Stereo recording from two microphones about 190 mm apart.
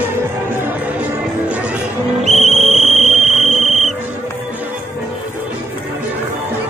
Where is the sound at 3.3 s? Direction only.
Centre (ahead or behind).